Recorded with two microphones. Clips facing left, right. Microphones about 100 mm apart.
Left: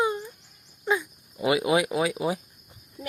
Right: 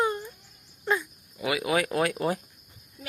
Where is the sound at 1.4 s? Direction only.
25° left (ahead or behind).